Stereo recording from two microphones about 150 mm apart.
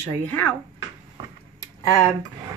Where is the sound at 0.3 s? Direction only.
15° left (ahead or behind).